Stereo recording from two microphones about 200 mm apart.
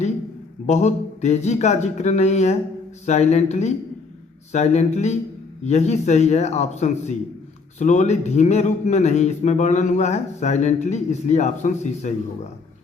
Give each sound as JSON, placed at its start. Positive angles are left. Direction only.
{"t": 0.7, "sound": "a man's voice", "side_deg": 35}